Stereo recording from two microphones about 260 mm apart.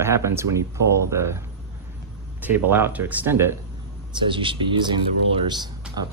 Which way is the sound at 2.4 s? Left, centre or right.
Centre.